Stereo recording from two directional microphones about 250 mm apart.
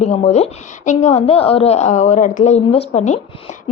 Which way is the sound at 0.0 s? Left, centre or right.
Left.